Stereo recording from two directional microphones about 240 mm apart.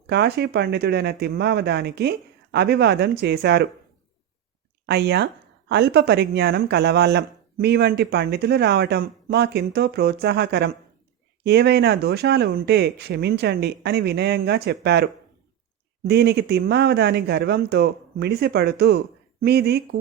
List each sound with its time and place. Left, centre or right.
0.1 s speech: right
4.9 s speech: right